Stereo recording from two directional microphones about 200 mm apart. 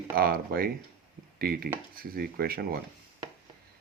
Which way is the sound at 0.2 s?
50° right (ahead or behind).